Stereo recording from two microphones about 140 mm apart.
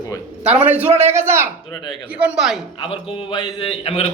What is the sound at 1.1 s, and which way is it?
Speech, 20° right (ahead or behind).